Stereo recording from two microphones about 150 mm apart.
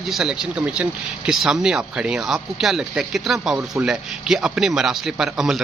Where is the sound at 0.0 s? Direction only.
Centre (ahead or behind).